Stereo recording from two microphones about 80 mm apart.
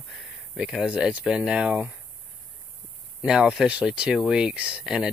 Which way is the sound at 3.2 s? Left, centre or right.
Centre.